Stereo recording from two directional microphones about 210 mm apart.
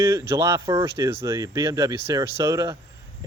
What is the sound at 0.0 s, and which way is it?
Speech, 10° right (ahead or behind).